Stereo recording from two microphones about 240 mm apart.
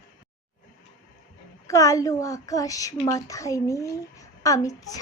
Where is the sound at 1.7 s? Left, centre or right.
Centre.